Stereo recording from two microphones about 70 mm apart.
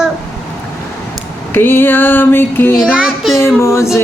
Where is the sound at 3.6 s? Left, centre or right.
Left.